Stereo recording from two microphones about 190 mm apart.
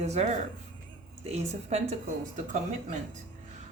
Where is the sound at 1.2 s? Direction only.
35° right (ahead or behind).